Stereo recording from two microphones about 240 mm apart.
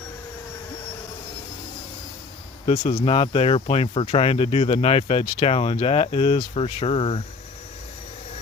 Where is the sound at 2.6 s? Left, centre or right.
Left.